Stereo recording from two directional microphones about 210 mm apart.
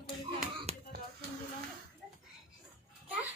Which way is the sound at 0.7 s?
30° right (ahead or behind).